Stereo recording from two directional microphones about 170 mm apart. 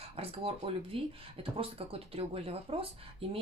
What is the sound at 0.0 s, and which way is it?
Speech, 35° right (ahead or behind).